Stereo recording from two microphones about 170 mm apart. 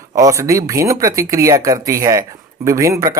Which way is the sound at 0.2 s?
20° right (ahead or behind).